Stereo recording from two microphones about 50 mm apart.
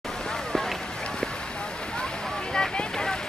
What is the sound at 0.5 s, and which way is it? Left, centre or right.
Run, centre.